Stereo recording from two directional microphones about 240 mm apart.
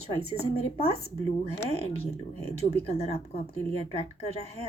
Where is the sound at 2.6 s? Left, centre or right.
Left.